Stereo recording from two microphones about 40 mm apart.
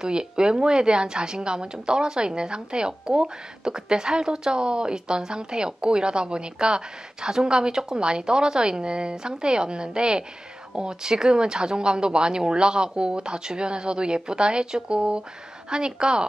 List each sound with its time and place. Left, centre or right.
0.0 s a woman's voice: right